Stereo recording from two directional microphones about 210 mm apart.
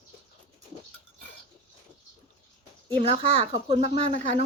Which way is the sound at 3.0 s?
30° right (ahead or behind).